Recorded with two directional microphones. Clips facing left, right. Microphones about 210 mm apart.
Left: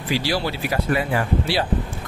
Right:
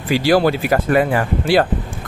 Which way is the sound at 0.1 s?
50° right (ahead or behind).